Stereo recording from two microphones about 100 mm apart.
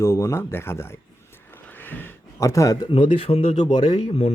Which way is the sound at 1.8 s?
20° left (ahead or behind).